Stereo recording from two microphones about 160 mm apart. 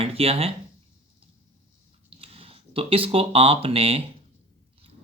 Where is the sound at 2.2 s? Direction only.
35° right (ahead or behind).